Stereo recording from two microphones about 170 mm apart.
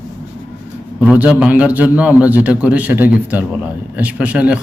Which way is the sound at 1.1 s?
5° right (ahead or behind).